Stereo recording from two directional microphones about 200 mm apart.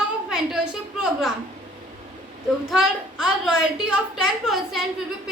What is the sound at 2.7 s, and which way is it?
A woman's voice, 5° right (ahead or behind).